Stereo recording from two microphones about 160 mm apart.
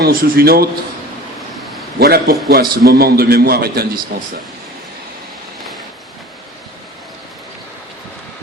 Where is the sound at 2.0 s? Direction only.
75° right (ahead or behind).